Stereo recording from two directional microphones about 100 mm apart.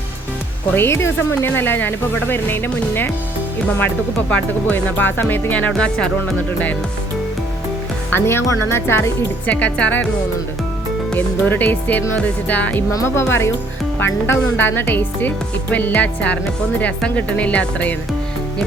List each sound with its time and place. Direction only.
0.8 s speech: 25° left (ahead or behind)
4.3 s speech: 15° left (ahead or behind)
8.1 s speech: 25° left (ahead or behind)
9.5 s speech: 15° left (ahead or behind)
11.1 s speech: 15° left (ahead or behind)